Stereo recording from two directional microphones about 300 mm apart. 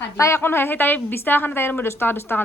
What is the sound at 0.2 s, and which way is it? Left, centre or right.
A woman's voice, centre.